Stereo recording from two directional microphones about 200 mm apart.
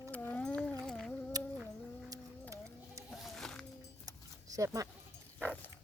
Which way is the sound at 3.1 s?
Centre (ahead or behind).